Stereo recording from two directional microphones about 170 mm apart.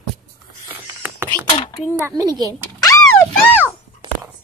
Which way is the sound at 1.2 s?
15° right (ahead or behind).